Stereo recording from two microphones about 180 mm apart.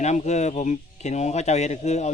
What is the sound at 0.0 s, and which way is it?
Speech, 40° left (ahead or behind).